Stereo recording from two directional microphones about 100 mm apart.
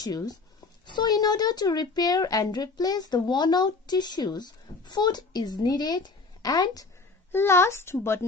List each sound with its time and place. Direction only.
0.0 s speech: 40° left (ahead or behind)
7.3 s speech: 25° left (ahead or behind)